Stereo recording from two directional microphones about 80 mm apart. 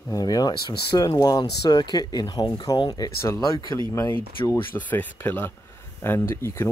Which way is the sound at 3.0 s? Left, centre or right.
Left.